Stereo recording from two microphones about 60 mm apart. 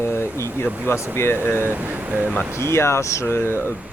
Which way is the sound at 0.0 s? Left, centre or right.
Left.